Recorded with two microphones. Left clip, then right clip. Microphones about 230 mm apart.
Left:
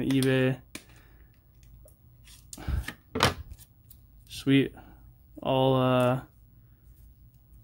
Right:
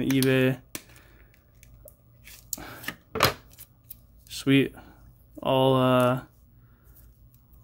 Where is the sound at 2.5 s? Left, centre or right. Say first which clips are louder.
Right 4 dB; centre.